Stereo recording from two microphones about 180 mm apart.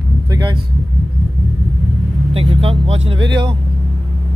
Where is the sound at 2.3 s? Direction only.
30° right (ahead or behind).